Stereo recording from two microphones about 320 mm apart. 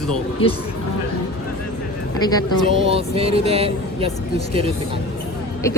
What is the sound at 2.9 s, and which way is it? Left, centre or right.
Speech, centre.